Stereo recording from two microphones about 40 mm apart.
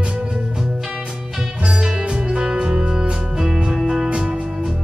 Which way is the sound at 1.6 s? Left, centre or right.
Right.